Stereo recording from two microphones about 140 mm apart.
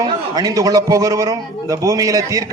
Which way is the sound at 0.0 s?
25° right (ahead or behind).